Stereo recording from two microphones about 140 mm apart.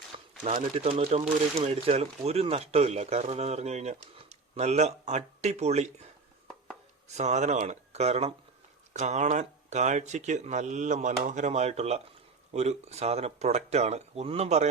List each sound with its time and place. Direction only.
0.4 s speech: 50° right (ahead or behind)
7.1 s speech: 55° right (ahead or behind)